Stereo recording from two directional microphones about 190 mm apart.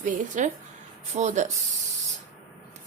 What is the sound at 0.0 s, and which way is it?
A woman's voice, 40° right (ahead or behind).